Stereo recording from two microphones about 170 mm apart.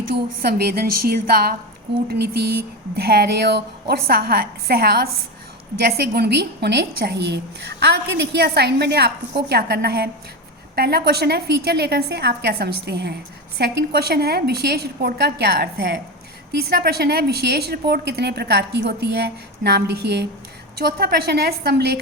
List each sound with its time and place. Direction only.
0.1 s a woman's voice: 65° right (ahead or behind)